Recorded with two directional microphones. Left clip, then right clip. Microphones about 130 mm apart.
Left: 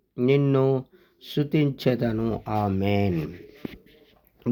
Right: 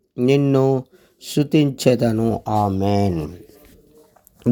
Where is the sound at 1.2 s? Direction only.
45° right (ahead or behind).